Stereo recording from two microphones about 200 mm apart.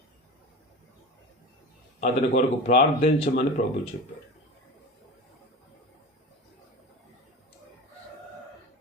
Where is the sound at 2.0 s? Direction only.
40° left (ahead or behind).